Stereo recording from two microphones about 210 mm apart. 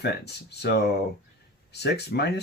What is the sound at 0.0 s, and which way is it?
Speech, 50° left (ahead or behind).